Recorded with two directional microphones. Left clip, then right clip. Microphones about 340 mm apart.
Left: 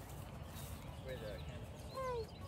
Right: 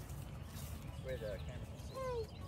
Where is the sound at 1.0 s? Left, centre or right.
Centre.